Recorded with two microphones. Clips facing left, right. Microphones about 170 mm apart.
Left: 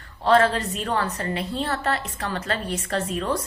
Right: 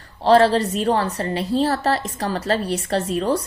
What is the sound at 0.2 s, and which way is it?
A woman's voice, 30° right (ahead or behind).